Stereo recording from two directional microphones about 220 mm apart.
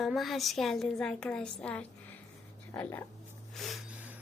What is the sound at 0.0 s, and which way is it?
A woman's voice, centre (ahead or behind).